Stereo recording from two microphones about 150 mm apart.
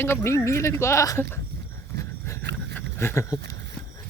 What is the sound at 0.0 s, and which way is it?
Speech, 15° left (ahead or behind).